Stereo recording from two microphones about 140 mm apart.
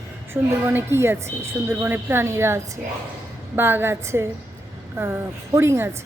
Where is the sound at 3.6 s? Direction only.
15° right (ahead or behind).